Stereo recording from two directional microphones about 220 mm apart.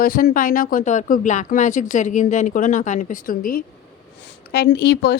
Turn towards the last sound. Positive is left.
turn(degrees=50)  # may be behind; listen again after turning